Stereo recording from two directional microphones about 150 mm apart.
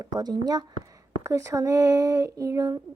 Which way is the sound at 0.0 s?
25° right (ahead or behind).